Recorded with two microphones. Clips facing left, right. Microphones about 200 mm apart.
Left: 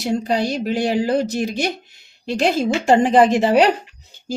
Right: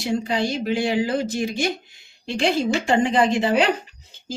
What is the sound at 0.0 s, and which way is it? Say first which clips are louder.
A woman's voice: left 3 dB; 45° left (ahead or behind).